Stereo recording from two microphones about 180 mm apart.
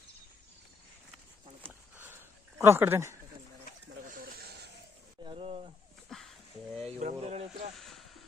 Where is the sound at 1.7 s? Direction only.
10° right (ahead or behind).